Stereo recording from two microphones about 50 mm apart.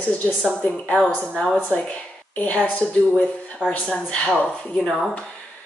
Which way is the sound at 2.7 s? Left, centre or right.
Left.